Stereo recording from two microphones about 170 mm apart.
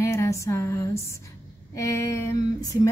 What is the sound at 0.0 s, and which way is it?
A woman's voice, 15° left (ahead or behind).